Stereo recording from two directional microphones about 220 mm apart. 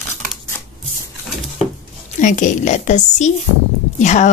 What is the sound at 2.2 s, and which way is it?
A woman's voice, 35° left (ahead or behind).